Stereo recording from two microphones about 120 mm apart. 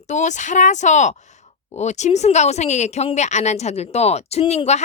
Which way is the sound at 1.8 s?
75° left (ahead or behind).